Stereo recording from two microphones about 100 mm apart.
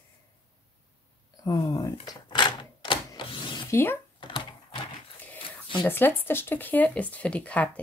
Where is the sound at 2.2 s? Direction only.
50° left (ahead or behind).